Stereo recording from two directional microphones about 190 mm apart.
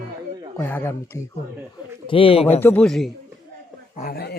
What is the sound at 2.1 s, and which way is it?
Speech, 30° left (ahead or behind).